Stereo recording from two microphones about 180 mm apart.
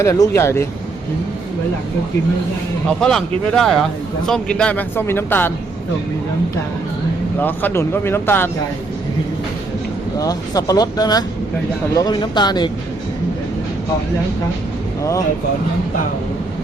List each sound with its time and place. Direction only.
0.0 s speech: 15° left (ahead or behind)
3.0 s speech: 5° left (ahead or behind)
7.3 s speech: 10° left (ahead or behind)
10.2 s speech: 20° left (ahead or behind)